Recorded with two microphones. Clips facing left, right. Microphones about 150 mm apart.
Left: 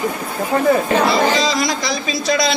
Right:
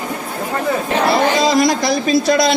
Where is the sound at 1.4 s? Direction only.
55° right (ahead or behind).